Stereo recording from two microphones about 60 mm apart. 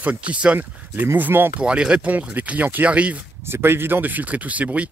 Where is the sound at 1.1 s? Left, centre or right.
Right.